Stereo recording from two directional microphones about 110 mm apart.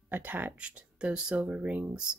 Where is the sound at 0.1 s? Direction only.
15° right (ahead or behind).